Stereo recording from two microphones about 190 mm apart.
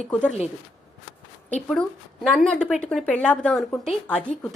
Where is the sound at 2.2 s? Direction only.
5° left (ahead or behind).